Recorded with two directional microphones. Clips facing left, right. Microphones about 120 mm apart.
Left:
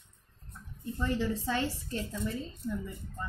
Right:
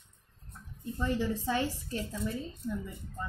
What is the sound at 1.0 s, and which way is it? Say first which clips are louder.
A woman's voice: even; 15° right (ahead or behind).